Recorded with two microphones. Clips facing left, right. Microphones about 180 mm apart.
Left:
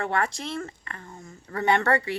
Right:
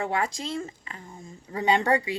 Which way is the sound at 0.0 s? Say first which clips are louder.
Left 1 dB; 10° right (ahead or behind).